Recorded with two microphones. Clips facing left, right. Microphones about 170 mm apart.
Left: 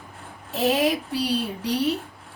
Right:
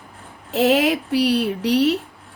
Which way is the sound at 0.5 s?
75° right (ahead or behind).